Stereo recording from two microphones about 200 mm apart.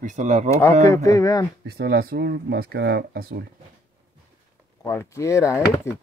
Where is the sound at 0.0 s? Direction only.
35° right (ahead or behind).